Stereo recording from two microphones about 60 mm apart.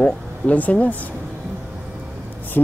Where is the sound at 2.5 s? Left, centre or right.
Left.